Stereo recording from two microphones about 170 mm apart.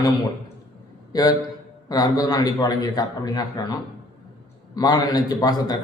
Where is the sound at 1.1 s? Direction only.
25° left (ahead or behind).